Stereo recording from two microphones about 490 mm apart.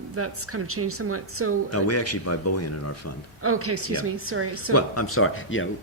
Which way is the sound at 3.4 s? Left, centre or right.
Right.